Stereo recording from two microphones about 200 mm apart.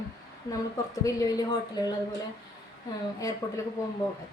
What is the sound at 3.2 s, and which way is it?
Speech, 15° left (ahead or behind).